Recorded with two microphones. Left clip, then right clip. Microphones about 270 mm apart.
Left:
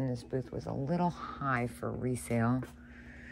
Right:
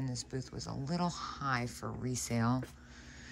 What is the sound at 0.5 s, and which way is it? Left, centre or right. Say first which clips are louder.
Speech: left 6 dB; centre.